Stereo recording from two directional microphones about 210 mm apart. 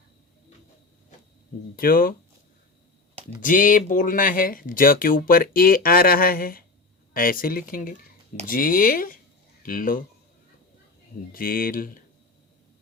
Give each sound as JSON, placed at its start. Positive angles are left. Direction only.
{"t": 1.7, "sound": "speech", "side_deg": 45}
{"t": 3.4, "sound": "speech", "side_deg": 40}
{"t": 11.3, "sound": "speech", "side_deg": 45}